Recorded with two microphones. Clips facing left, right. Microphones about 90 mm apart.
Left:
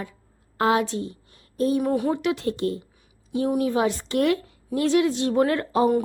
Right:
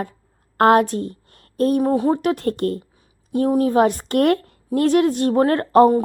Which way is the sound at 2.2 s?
50° right (ahead or behind).